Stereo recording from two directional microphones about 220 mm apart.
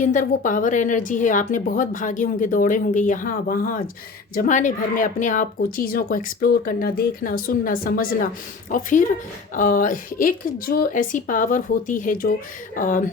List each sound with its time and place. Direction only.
0.0 s a woman's voice: 35° left (ahead or behind)